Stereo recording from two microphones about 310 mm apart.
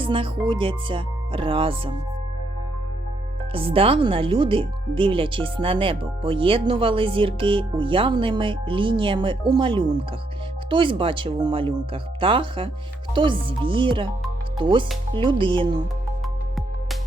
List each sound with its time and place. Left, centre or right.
0.0 s music: centre
0.4 s speech: centre
3.5 s speech: centre